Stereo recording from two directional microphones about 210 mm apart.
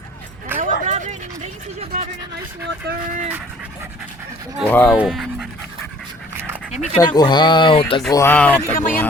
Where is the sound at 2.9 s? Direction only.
50° right (ahead or behind).